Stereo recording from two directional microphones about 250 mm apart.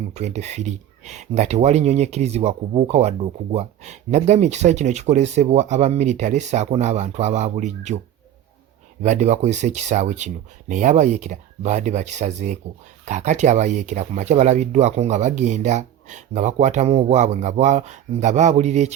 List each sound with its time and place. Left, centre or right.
0.1 s speech: right
9.0 s speech: right